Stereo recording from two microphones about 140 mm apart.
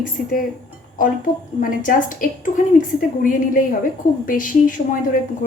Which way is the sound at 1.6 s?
70° left (ahead or behind).